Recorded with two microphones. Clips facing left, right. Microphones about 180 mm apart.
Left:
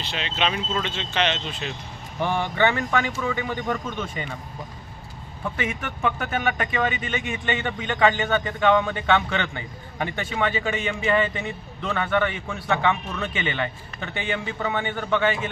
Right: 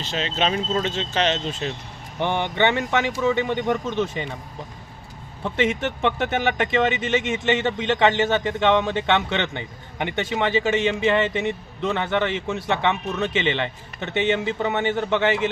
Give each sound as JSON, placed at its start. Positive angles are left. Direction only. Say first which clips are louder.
{"t": 0.0, "sound": "speech", "louder": "right 3 dB", "side_deg": -40}
{"t": 2.1, "sound": "a man's voice", "louder": "right 1 dB", "side_deg": -20}
{"t": 5.4, "sound": "a man's voice", "louder": "right 6 dB", "side_deg": -25}